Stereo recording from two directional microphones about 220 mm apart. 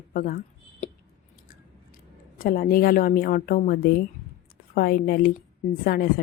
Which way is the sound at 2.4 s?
40° left (ahead or behind).